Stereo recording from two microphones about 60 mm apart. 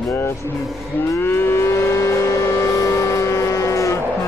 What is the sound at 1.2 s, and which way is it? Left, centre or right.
Vehicle, left.